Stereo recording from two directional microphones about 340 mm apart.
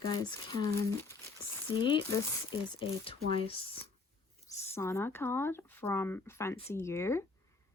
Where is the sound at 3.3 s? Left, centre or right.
Centre.